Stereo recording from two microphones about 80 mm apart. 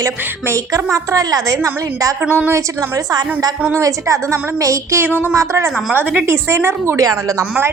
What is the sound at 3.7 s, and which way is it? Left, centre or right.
A woman's voice, right.